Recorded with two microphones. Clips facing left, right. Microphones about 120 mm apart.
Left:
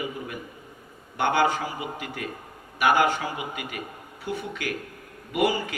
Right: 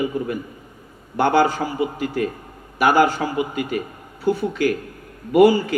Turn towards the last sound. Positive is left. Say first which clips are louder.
# right 11 dB
turn(degrees=-35)  # may be behind; listen again after turning